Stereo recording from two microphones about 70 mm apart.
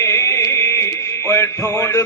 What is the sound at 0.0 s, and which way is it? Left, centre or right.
Music, left.